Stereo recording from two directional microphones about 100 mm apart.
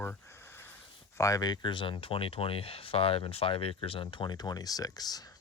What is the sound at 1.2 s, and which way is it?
Speech, 35° left (ahead or behind).